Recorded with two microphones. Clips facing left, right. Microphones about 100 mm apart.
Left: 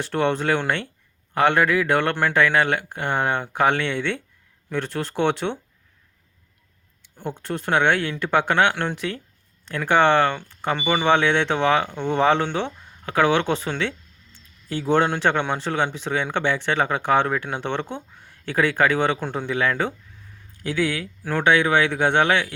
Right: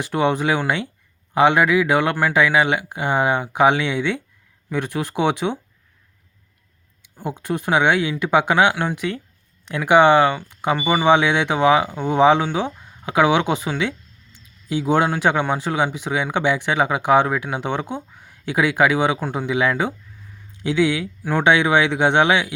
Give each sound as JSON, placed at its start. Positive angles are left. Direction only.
{"t": 0.0, "sound": "speech", "side_deg": -10}
{"t": 7.2, "sound": "speech", "side_deg": -10}